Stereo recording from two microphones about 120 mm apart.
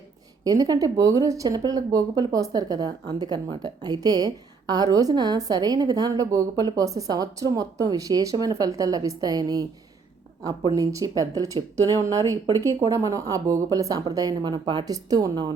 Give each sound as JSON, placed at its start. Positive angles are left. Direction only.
{"t": 0.4, "sound": "speech", "side_deg": -30}
{"t": 10.8, "sound": "speech", "side_deg": -30}